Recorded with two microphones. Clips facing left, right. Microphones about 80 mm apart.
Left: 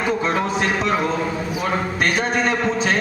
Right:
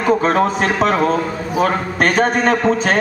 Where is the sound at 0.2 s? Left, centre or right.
Right.